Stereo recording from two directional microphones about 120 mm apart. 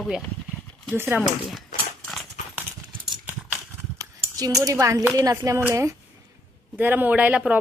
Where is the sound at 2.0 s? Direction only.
Centre (ahead or behind).